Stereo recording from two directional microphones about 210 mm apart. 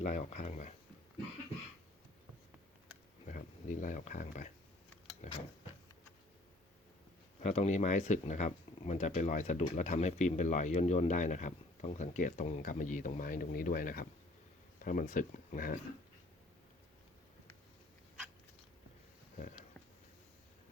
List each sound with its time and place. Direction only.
0.0 s speech: 35° left (ahead or behind)
3.2 s speech: 40° left (ahead or behind)
7.4 s speech: 30° left (ahead or behind)